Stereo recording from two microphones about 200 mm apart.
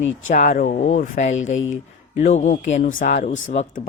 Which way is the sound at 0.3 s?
40° left (ahead or behind).